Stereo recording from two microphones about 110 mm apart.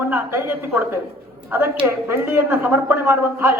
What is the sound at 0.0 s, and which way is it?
A man's voice, 20° right (ahead or behind).